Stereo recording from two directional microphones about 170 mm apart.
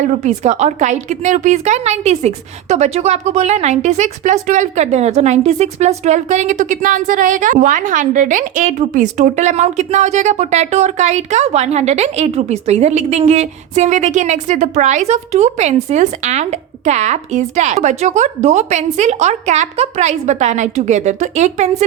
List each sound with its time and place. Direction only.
0.0 s a woman's voice: 45° right (ahead or behind)